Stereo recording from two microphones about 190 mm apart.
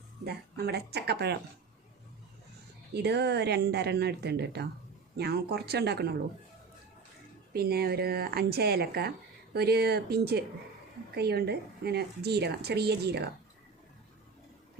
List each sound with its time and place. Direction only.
0.3 s speech: 60° right (ahead or behind)
2.9 s speech: 60° right (ahead or behind)
7.5 s speech: 55° right (ahead or behind)